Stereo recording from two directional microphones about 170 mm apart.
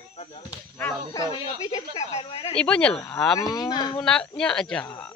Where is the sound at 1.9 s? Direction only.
35° left (ahead or behind).